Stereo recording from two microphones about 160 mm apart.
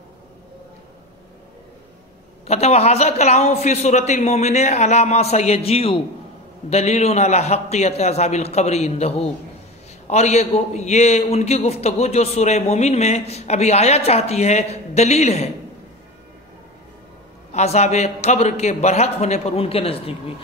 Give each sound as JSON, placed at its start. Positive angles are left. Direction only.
{"t": 2.4, "sound": "a man's voice", "side_deg": 40}
{"t": 17.5, "sound": "a man's voice", "side_deg": 45}